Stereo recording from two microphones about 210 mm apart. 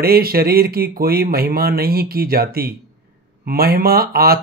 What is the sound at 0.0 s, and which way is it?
Speech, 45° right (ahead or behind).